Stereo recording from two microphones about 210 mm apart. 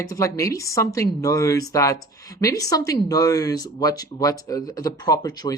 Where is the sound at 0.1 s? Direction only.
15° left (ahead or behind).